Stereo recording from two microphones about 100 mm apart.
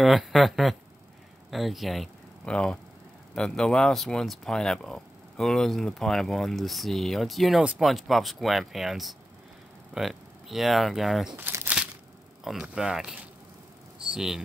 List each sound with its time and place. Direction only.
0.0 s speech: centre (ahead or behind)
11.3 s crumpling: 20° right (ahead or behind)
12.7 s speech: 5° right (ahead or behind)
14.1 s speech: 5° right (ahead or behind)